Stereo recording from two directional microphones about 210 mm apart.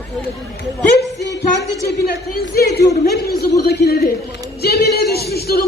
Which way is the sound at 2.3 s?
45° left (ahead or behind).